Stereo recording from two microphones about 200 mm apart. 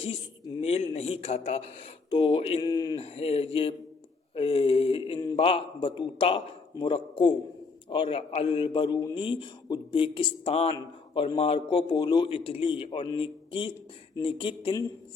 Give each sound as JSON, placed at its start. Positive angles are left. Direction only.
{"t": 0.0, "sound": "a man's voice", "side_deg": 25}
{"t": 3.0, "sound": "a man's voice", "side_deg": 30}